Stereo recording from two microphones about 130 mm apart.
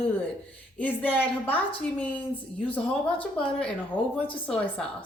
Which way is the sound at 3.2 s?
10° left (ahead or behind).